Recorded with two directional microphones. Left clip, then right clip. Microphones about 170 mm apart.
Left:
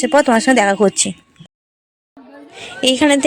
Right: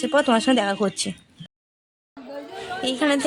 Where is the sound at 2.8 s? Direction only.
30° left (ahead or behind).